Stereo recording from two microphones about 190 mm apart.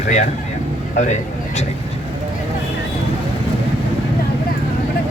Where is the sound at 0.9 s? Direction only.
40° left (ahead or behind).